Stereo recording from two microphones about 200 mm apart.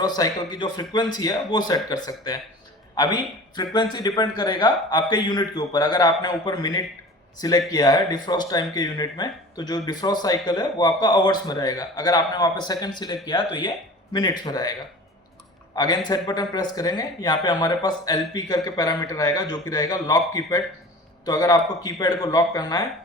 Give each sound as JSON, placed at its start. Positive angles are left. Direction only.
{"t": 0.0, "sound": "a man's voice", "side_deg": 20}